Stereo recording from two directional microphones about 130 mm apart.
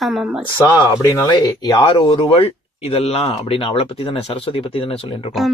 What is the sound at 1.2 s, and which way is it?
Speech, 30° left (ahead or behind).